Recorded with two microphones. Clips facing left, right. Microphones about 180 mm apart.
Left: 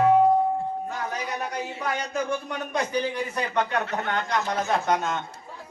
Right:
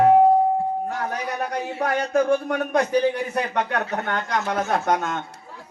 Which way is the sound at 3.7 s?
55° right (ahead or behind).